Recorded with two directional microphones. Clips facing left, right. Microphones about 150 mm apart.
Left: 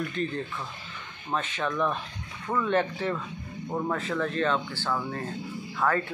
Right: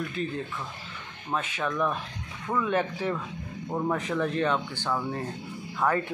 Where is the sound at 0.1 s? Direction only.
5° right (ahead or behind).